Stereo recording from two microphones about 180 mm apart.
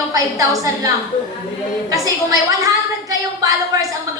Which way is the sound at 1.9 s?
20° right (ahead or behind).